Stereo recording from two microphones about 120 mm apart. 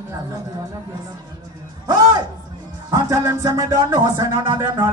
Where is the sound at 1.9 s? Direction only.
35° right (ahead or behind).